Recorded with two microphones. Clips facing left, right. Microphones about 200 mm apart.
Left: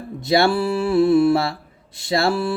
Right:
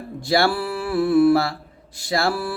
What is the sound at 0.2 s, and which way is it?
Speech, 20° left (ahead or behind).